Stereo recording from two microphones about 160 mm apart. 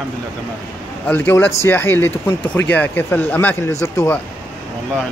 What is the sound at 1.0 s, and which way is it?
Speech, 10° left (ahead or behind).